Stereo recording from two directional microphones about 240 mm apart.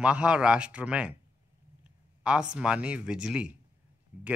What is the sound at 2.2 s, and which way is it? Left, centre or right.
Speech, centre.